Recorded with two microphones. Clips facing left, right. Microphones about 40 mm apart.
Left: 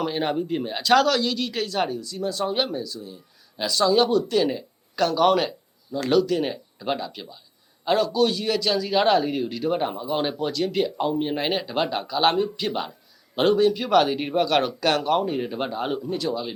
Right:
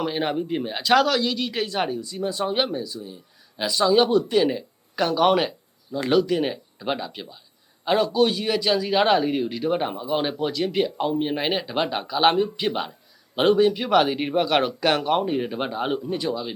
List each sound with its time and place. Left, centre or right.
0.0 s a man's voice: centre